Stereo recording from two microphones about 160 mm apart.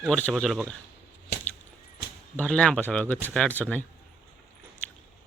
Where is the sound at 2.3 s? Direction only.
5° left (ahead or behind).